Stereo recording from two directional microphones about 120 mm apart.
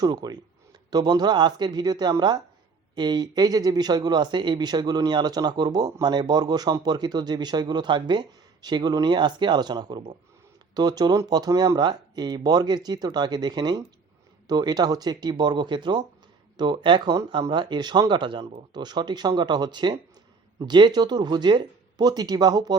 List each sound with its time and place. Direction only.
0.0 s speech: 35° right (ahead or behind)